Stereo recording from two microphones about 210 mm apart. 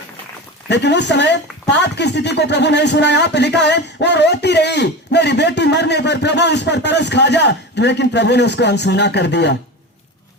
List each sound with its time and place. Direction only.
0.7 s speech: 55° left (ahead or behind)